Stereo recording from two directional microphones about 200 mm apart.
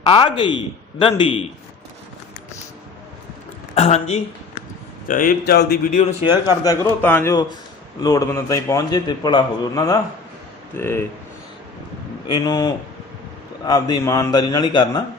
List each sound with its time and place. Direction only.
0.1 s a man's voice: 25° left (ahead or behind)
3.8 s speech: 35° left (ahead or behind)
5.0 s a man's voice: 45° left (ahead or behind)
6.0 s a man's voice: 25° left (ahead or behind)
7.0 s a man's voice: 10° left (ahead or behind)
12.3 s a man's voice: 20° left (ahead or behind)